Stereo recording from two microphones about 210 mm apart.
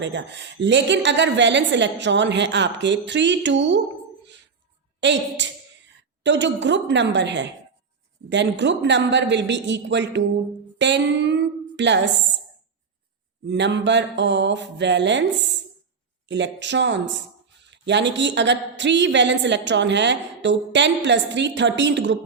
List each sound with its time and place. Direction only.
0.0 s a woman's voice: 55° right (ahead or behind)
4.9 s a woman's voice: 55° right (ahead or behind)
10.8 s music: 55° right (ahead or behind)
11.8 s a woman's voice: 55° right (ahead or behind)
13.5 s a woman's voice: 55° right (ahead or behind)